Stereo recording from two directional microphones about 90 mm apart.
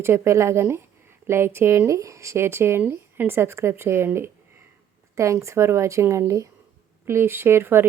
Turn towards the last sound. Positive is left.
turn(degrees=-25)  # may be behind; listen again after turning